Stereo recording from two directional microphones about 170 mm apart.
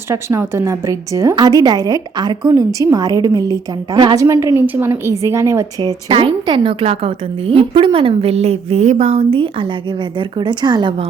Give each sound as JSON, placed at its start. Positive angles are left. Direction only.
{"t": 0.1, "sound": "a woman's voice", "side_deg": -15}
{"t": 6.1, "sound": "a woman's voice", "side_deg": -30}